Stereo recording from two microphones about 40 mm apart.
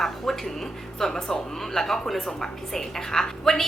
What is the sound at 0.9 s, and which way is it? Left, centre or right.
A woman's voice, centre.